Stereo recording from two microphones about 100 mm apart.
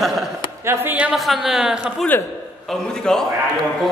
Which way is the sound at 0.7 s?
15° right (ahead or behind).